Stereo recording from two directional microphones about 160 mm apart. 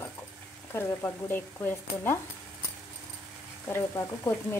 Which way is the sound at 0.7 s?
15° left (ahead or behind).